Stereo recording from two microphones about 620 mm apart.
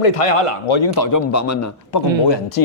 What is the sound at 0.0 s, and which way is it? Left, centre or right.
Speech, left.